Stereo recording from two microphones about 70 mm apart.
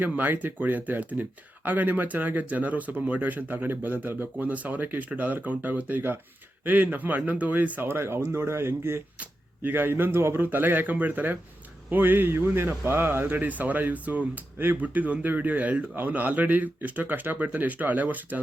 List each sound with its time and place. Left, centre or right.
0.0 s a man's voice: right
7.9 s speech: right
9.1 s a man's voice: right